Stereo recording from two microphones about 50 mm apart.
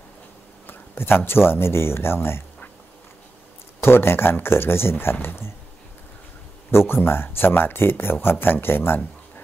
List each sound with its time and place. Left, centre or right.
0.7 s speech: left
3.8 s speech: left
6.7 s speech: left